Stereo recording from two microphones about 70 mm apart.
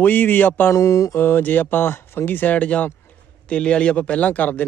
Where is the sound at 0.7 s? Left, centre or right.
Left.